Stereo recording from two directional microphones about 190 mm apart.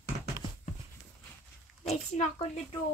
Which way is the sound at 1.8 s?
35° left (ahead or behind).